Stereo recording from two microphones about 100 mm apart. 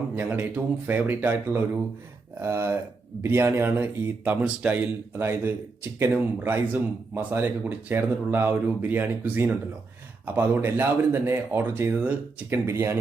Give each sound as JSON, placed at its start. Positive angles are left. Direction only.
{"t": 0.2, "sound": "speech", "side_deg": -20}